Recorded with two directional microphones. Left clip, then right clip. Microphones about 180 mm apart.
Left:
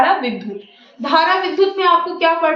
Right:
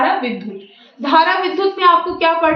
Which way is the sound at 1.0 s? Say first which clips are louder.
Right 1 dB; 25° right (ahead or behind).